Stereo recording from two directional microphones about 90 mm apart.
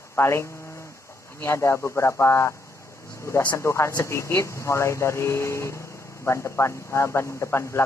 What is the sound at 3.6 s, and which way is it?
Speech, 30° left (ahead or behind).